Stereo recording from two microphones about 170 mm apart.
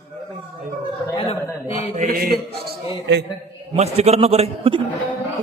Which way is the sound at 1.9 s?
55° right (ahead or behind).